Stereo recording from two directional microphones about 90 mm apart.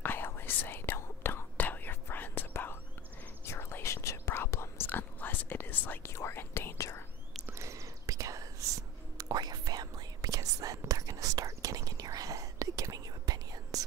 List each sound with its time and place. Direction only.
0.0 s whispering: 25° left (ahead or behind)
7.4 s whispering: 30° right (ahead or behind)